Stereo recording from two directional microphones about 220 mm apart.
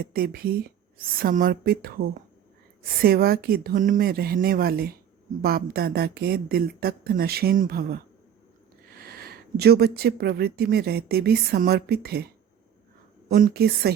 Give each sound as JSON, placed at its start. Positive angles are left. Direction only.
{"t": 0.1, "sound": "speech", "side_deg": -40}
{"t": 3.0, "sound": "speech", "side_deg": -45}
{"t": 13.3, "sound": "speech", "side_deg": -45}